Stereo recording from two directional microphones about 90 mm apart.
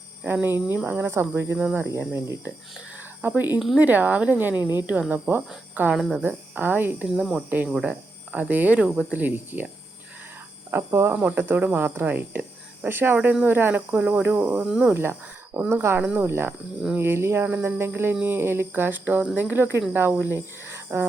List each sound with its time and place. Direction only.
0.4 s speech: 25° right (ahead or behind)
1.8 s speech: 30° right (ahead or behind)
5.9 s speech: 5° right (ahead or behind)
6.2 s speech: 20° right (ahead or behind)
7.2 s speech: 10° right (ahead or behind)
10.7 s speech: 30° right (ahead or behind)
11.1 s speech: 15° right (ahead or behind)
15.7 s speech: 30° right (ahead or behind)
16.5 s speech: 15° right (ahead or behind)
17.0 s speech: 30° right (ahead or behind)